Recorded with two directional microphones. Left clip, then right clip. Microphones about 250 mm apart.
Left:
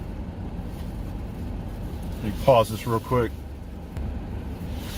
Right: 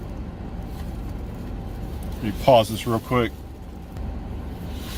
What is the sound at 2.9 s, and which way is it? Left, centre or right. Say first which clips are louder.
Speech: right 1 dB; centre.